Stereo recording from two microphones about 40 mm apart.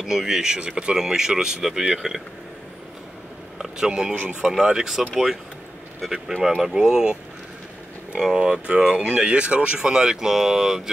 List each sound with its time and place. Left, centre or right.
0.0 s speech: centre
0.6 s speech: right
0.9 s speech: centre
3.6 s speech: centre
4.1 s speech: right
4.4 s speech: centre
6.4 s speech: centre
8.2 s speech: centre